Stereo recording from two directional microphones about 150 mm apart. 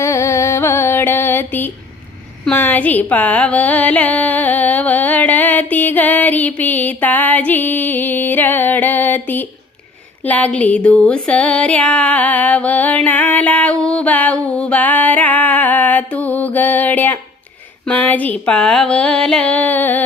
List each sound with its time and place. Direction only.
0.0 s music: 20° left (ahead or behind)
2.4 s carnatic music: 10° left (ahead or behind)
10.2 s a sound: 10° left (ahead or behind)